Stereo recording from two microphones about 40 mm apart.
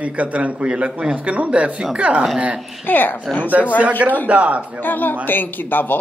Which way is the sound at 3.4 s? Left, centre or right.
Right.